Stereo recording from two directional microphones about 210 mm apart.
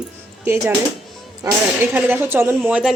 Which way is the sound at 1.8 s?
10° right (ahead or behind).